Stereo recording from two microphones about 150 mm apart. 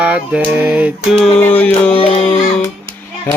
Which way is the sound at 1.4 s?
10° left (ahead or behind).